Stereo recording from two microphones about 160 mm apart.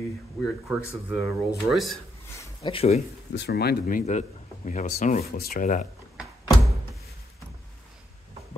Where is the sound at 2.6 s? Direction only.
35° left (ahead or behind).